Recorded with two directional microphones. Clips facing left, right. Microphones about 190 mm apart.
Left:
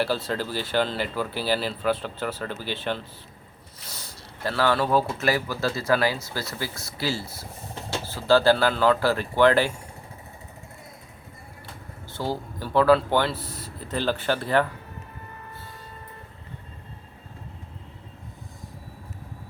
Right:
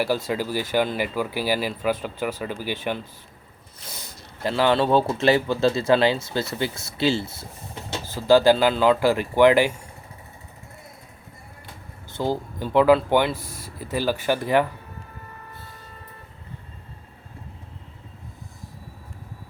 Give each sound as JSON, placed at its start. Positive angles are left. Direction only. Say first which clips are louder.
{"t": 0.0, "sound": "speech", "louder": "right 2 dB", "side_deg": -15}
{"t": 3.9, "sound": "speech", "louder": "even", "side_deg": -20}
{"t": 12.1, "sound": "speech", "louder": "right 4 dB", "side_deg": -20}